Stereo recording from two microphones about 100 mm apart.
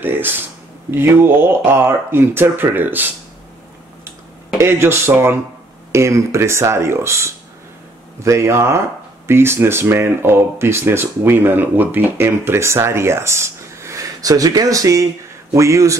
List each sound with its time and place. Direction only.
0.0 s speech: 20° right (ahead or behind)
4.6 s speech: 25° right (ahead or behind)